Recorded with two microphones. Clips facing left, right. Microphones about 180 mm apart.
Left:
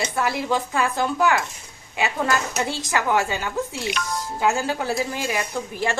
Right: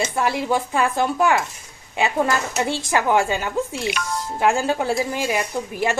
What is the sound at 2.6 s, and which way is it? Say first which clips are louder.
A woman's voice: right 3 dB; 20° right (ahead or behind).